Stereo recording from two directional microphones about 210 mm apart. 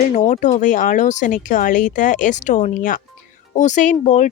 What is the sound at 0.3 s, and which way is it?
Speech, 35° left (ahead or behind).